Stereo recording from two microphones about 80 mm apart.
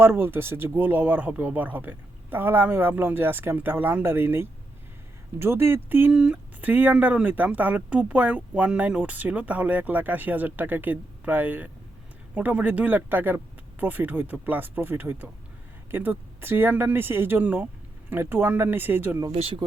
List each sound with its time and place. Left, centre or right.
0.0 s speech: right
6.1 s speech: centre